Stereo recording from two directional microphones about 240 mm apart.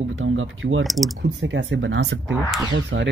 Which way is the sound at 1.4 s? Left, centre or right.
Right.